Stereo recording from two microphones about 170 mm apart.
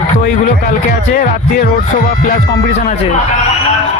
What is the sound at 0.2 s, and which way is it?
Speech, 55° left (ahead or behind).